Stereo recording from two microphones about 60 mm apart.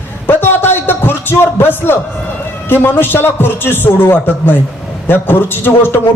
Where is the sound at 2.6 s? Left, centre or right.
Left.